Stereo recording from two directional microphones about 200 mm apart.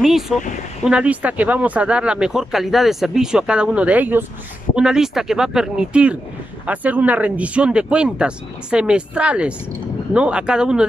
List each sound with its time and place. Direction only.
0.0 s speech: centre (ahead or behind)